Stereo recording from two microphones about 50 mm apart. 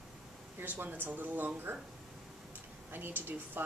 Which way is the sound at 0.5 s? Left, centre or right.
Right.